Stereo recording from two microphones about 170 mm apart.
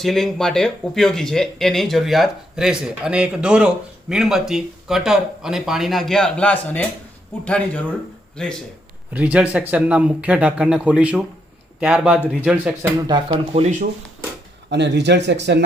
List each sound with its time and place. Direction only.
0.0 s speech: centre (ahead or behind)
9.1 s speech: 10° right (ahead or behind)
13.1 s speech: 25° right (ahead or behind)
14.7 s speech: 90° right